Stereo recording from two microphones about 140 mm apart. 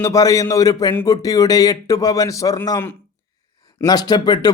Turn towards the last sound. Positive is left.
turn(degrees=30)  # may be behind; listen again after turning